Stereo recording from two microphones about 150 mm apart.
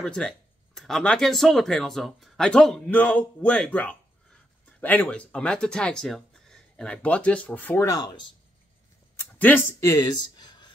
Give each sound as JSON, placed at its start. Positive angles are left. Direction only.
{"t": 0.0, "sound": "speech", "side_deg": 5}
{"t": 9.2, "sound": "speech", "side_deg": 15}